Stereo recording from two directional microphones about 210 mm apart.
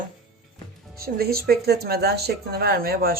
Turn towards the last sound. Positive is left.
turn(degrees=-45)  # may be behind; listen again after turning